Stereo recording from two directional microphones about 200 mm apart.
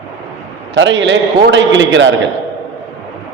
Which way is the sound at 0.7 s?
65° right (ahead or behind).